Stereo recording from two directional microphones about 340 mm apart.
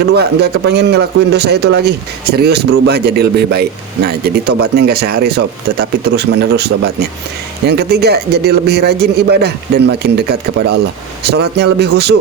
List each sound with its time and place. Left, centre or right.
0.1 s a man's voice: right